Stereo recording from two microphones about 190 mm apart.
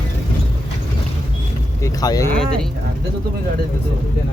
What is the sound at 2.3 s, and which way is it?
Speech, 5° left (ahead or behind).